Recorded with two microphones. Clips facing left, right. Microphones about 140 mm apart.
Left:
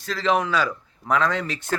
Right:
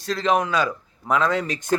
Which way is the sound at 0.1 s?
20° right (ahead or behind).